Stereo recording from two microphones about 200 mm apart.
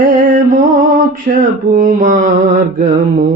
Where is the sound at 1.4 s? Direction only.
40° right (ahead or behind).